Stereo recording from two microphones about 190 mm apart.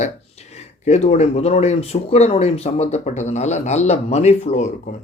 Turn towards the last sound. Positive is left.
turn(degrees=35)  # may be behind; listen again after turning